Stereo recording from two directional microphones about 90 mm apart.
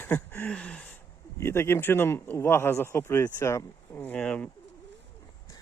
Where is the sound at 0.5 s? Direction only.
10° left (ahead or behind).